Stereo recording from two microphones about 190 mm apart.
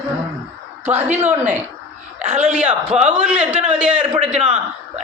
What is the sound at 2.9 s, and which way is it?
Speech, 35° right (ahead or behind).